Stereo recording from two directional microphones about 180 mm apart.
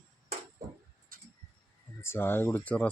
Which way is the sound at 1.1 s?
50° right (ahead or behind).